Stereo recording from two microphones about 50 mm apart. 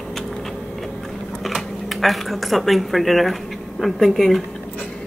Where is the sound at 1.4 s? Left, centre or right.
Centre.